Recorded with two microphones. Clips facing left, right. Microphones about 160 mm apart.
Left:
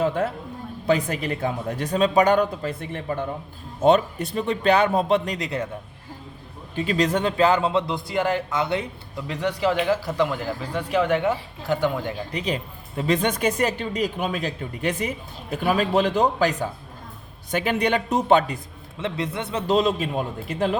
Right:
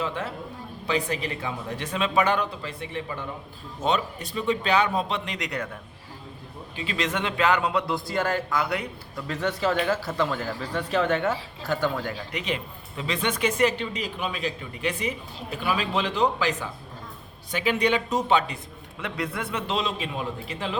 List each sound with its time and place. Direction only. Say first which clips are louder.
0.0 s a man's voice: left 7 dB; 45° left (ahead or behind)
6.7 s a man's voice: left 7 dB; 40° left (ahead or behind); by 12.1 s 15° left (ahead or behind)
12.3 s speech: left 3 dB; 35° left (ahead or behind)
18.9 s a man's voice: left 3 dB; 25° left (ahead or behind)
19.6 s speech: left 11 dB; 45° left (ahead or behind)